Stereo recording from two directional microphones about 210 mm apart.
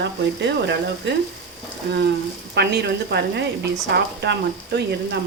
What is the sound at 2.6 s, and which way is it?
Speech, 50° right (ahead or behind).